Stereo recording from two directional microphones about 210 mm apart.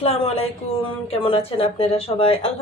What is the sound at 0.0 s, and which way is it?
A woman's voice, 30° left (ahead or behind).